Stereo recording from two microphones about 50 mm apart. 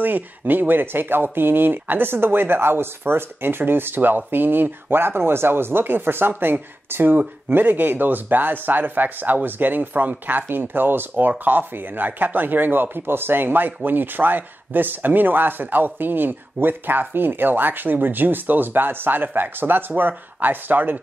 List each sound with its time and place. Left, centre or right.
0.0 s speech: right